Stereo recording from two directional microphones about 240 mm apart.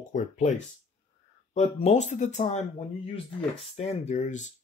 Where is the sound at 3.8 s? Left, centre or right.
Left.